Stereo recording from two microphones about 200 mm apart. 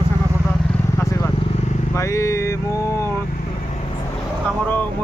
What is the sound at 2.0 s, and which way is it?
Speech, 15° left (ahead or behind).